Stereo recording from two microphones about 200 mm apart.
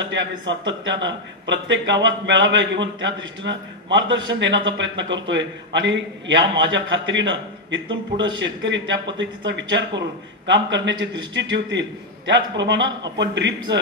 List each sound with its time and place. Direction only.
0.1 s a man's voice: 65° right (ahead or behind)